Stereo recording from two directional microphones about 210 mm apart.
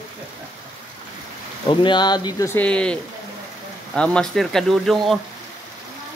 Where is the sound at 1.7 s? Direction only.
20° left (ahead or behind); by 5.2 s centre (ahead or behind).